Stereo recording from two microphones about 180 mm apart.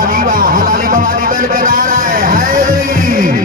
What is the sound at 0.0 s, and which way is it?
Speech, 50° right (ahead or behind).